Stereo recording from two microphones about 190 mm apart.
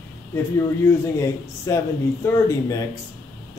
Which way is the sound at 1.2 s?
15° left (ahead or behind).